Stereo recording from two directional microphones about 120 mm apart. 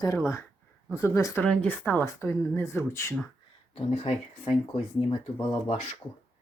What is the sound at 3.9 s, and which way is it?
Speech, 60° left (ahead or behind).